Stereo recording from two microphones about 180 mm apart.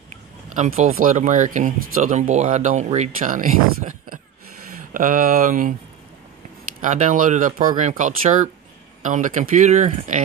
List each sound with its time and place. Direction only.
0.1 s speech: 40° right (ahead or behind)
6.8 s speech: 45° right (ahead or behind)